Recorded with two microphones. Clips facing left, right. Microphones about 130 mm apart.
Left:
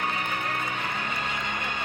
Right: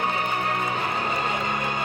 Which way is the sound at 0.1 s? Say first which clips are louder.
Right 5 dB; 35° right (ahead or behind).